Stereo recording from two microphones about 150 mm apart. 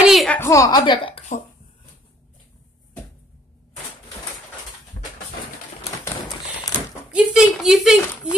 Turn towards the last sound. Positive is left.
turn(degrees=0)  # may be behind; listen again after turning